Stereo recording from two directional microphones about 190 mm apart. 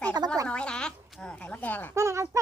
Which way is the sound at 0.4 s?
5° left (ahead or behind).